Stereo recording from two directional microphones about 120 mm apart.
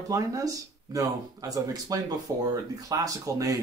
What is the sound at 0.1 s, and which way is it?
Speech, 30° right (ahead or behind).